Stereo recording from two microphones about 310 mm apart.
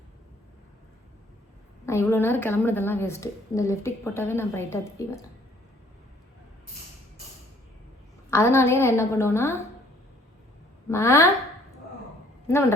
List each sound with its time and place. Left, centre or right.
1.9 s a woman's voice: centre
8.3 s a woman's voice: centre
10.8 s a woman's voice: centre
12.5 s a woman's voice: centre